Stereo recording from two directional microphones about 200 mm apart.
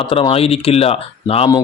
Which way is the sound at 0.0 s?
25° left (ahead or behind).